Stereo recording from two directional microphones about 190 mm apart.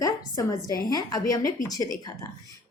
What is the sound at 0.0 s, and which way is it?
Speech, 20° left (ahead or behind).